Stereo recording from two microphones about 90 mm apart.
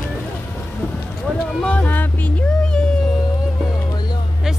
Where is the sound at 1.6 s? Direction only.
15° left (ahead or behind).